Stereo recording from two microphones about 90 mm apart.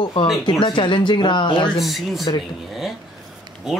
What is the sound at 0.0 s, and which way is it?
Speech, 70° left (ahead or behind).